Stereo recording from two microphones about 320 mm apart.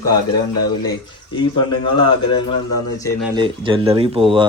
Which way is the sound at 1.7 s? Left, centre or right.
Centre.